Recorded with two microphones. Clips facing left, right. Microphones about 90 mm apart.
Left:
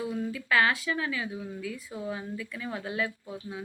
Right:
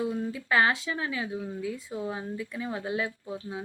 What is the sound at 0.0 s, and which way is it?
Speech, 30° right (ahead or behind).